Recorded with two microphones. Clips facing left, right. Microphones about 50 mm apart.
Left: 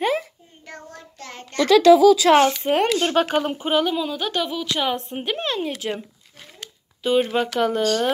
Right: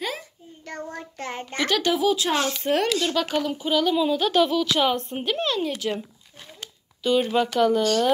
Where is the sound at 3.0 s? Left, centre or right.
Left.